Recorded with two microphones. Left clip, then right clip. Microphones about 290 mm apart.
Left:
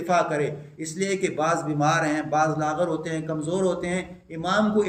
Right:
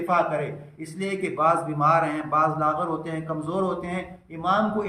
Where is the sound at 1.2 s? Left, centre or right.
Right.